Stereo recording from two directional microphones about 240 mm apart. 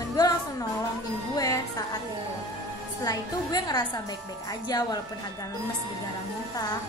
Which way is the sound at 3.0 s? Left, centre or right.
Centre.